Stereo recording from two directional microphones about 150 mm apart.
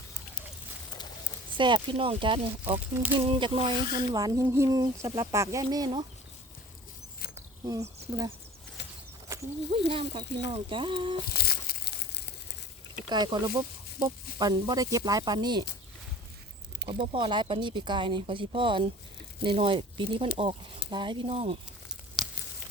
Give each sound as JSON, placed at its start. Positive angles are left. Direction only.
{"t": 1.5, "sound": "speech", "side_deg": -30}
{"t": 2.9, "sound": "speech", "side_deg": -10}
{"t": 3.2, "sound": "speech", "side_deg": -35}
{"t": 7.6, "sound": "speech", "side_deg": -25}
{"t": 9.3, "sound": "a sound", "side_deg": -20}
{"t": 9.7, "sound": "speech", "side_deg": -35}
{"t": 11.3, "sound": "crumpling", "side_deg": 90}
{"t": 13.1, "sound": "speech", "side_deg": -30}
{"t": 16.9, "sound": "speech", "side_deg": -35}
{"t": 21.8, "sound": "a sound", "side_deg": -5}